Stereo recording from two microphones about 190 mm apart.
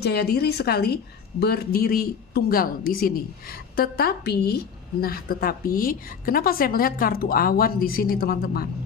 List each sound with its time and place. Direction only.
0.0 s a woman's voice: 60° left (ahead or behind)